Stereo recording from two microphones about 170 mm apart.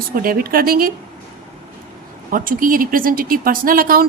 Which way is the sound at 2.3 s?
55° right (ahead or behind).